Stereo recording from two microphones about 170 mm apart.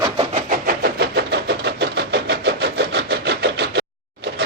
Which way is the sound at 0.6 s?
65° right (ahead or behind).